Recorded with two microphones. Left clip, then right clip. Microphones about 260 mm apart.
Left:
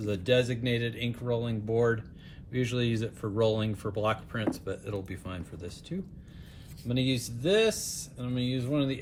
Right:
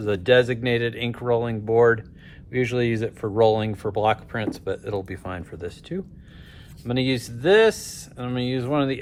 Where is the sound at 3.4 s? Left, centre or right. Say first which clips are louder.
Right 9 dB; centre.